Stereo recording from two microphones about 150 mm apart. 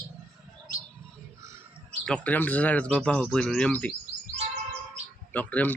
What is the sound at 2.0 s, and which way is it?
Speech, 10° left (ahead or behind).